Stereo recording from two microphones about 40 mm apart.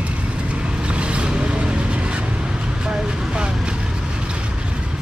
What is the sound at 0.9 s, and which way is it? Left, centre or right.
Vehicle, right.